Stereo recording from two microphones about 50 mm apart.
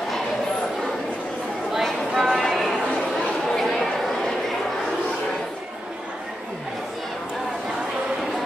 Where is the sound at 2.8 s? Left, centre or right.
Centre.